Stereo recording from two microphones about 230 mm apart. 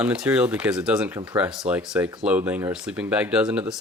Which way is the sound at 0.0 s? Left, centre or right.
Centre.